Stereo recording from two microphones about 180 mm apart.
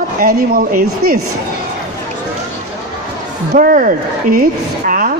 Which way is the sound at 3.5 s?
50° right (ahead or behind).